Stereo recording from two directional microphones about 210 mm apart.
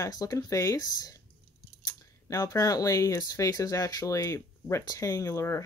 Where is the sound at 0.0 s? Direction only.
15° left (ahead or behind).